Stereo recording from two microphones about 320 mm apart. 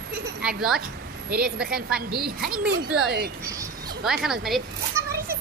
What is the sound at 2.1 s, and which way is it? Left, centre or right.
Speech, right.